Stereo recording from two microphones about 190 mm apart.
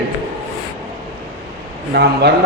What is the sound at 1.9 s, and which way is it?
Speech, 55° right (ahead or behind).